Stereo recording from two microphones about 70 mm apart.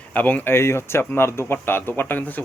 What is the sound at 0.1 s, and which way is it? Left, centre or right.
Speech, left.